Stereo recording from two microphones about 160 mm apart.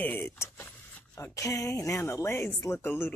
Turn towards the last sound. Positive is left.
turn(degrees=15)  # may be behind; listen again after turning